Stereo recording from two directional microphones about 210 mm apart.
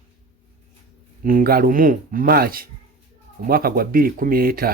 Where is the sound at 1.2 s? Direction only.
40° right (ahead or behind).